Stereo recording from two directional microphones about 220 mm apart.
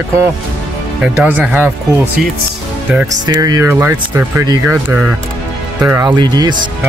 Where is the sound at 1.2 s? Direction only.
10° right (ahead or behind).